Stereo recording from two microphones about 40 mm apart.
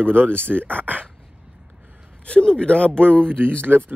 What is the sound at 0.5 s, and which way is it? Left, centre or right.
Speech, right.